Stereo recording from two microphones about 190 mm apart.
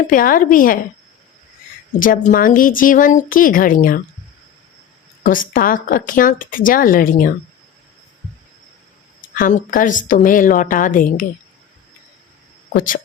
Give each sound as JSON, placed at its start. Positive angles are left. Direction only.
{"t": 0.0, "sound": "speech", "side_deg": 45}
{"t": 2.0, "sound": "speech", "side_deg": 45}
{"t": 5.2, "sound": "speech", "side_deg": 45}
{"t": 9.3, "sound": "speech", "side_deg": 45}
{"t": 12.7, "sound": "speech", "side_deg": 45}